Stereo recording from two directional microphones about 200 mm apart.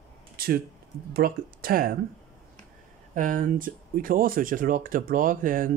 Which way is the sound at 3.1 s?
40° right (ahead or behind).